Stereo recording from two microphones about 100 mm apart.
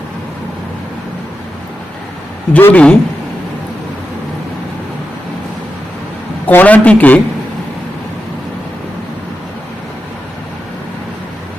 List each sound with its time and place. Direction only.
2.5 s a man's voice: 15° left (ahead or behind)
6.5 s a man's voice: 15° left (ahead or behind)